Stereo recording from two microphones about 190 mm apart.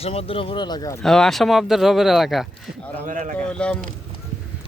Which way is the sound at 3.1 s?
45° right (ahead or behind).